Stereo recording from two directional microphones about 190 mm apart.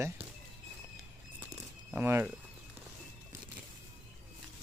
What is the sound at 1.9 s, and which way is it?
Speech, 10° right (ahead or behind).